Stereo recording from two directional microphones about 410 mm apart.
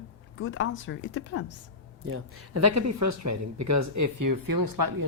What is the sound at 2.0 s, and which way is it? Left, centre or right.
Speech, right.